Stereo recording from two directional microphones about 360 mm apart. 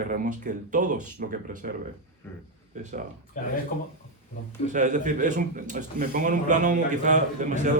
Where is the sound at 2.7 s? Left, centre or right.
Centre.